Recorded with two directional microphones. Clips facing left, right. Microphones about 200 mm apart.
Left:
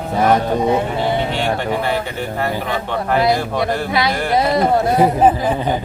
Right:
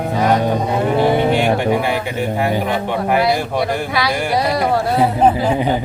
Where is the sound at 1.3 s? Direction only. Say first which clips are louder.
Right 4 dB; 10° right (ahead or behind).